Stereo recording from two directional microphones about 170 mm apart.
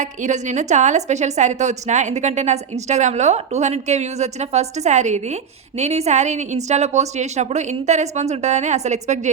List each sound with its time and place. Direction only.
0.0 s a woman's voice: 45° right (ahead or behind)